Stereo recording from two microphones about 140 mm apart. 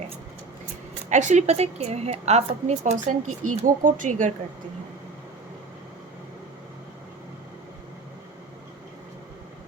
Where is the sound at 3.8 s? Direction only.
65° right (ahead or behind).